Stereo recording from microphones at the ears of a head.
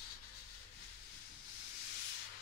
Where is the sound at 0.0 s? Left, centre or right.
Left.